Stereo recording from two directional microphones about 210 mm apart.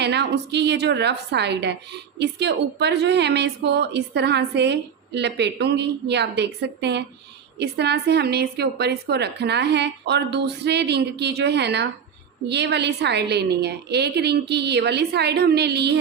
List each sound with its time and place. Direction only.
0.0 s a woman's voice: 55° right (ahead or behind)